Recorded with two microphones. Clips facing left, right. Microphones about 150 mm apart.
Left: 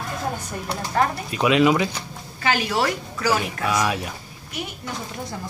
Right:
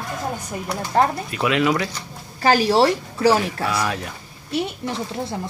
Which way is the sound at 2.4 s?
35° right (ahead or behind).